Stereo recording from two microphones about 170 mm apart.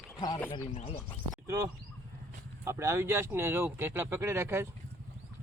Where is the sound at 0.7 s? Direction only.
35° left (ahead or behind).